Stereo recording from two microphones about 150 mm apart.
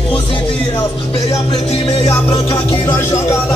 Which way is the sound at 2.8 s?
15° left (ahead or behind).